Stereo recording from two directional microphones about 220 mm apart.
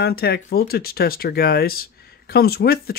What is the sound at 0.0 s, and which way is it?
Speech, 45° left (ahead or behind).